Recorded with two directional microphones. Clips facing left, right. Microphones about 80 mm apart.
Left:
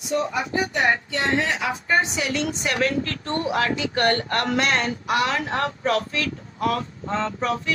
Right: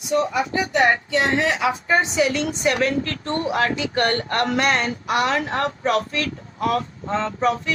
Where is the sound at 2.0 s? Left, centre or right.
Right.